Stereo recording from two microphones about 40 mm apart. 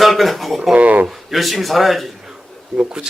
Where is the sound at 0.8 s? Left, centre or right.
Right.